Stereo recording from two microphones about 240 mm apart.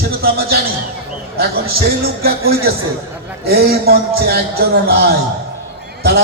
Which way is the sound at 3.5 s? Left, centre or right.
Right.